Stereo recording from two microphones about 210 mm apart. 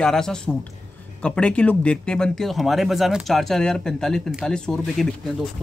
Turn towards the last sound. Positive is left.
turn(degrees=0)  # may be behind; listen again after turning